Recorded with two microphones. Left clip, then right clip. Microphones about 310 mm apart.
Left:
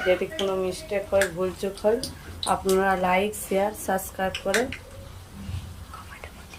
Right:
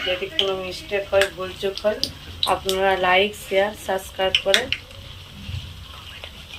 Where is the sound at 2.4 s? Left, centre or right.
Left.